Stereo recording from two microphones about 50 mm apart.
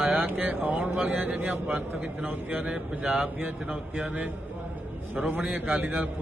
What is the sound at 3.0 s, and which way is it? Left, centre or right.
A man's voice, centre.